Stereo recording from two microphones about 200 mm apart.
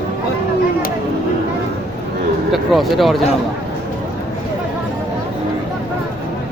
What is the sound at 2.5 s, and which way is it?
Speech, centre (ahead or behind).